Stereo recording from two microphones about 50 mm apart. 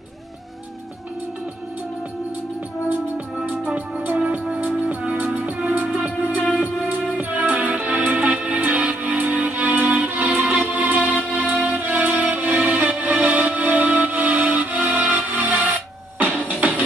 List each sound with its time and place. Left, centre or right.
3.6 s music: right
6.0 s music: right